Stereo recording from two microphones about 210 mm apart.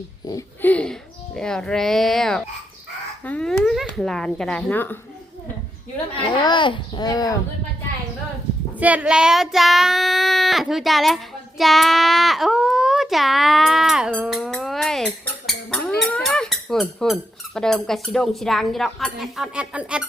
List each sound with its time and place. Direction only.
0.3 s a child's voice: 10° left (ahead or behind)
6.1 s a child's voice: 20° left (ahead or behind)
8.8 s child singing: 5° right (ahead or behind)